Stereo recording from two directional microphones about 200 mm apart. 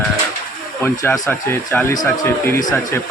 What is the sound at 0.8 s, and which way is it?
A man's voice, 10° left (ahead or behind).